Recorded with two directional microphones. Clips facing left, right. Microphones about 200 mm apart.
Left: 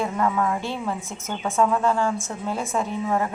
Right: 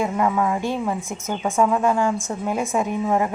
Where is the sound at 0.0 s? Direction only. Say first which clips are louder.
Right 2 dB; 15° right (ahead or behind).